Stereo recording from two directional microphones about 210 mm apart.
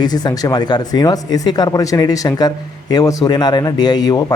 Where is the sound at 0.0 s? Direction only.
20° left (ahead or behind).